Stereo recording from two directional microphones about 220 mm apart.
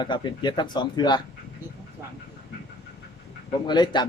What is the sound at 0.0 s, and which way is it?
A man's voice, 20° left (ahead or behind).